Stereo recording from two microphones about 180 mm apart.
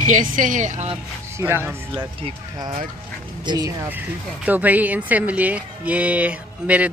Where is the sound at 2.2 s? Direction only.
25° right (ahead or behind).